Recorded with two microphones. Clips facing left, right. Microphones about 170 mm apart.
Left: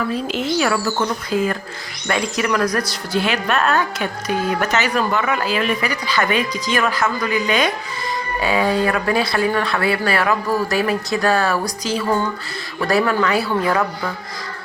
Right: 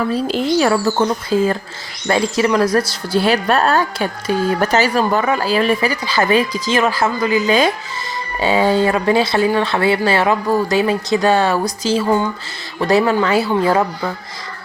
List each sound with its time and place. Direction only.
0.1 s speech: 35° right (ahead or behind)